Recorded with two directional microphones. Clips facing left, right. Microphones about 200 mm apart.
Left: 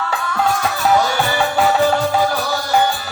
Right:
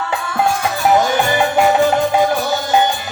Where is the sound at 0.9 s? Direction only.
20° right (ahead or behind).